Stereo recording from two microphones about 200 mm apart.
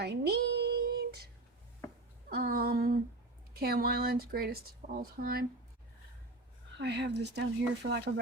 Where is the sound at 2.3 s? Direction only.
50° right (ahead or behind).